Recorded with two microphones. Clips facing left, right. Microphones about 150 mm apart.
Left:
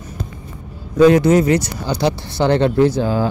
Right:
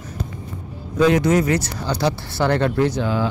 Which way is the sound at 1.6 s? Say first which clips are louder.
Left 3 dB; 15° left (ahead or behind).